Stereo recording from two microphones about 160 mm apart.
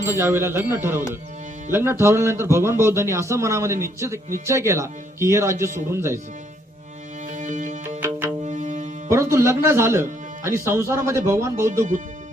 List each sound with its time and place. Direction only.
0.2 s a man's voice: 15° right (ahead or behind)
7.3 s music: 55° right (ahead or behind)
9.0 s music: 15° right (ahead or behind)
10.7 s a man's voice: 15° right (ahead or behind)